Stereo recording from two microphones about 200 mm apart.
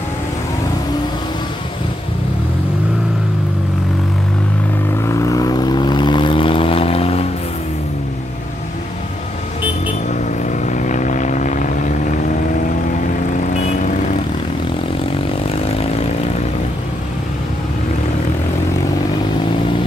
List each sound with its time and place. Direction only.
5.0 s vehicle: 15° left (ahead or behind)
10.6 s vehicle: 40° left (ahead or behind)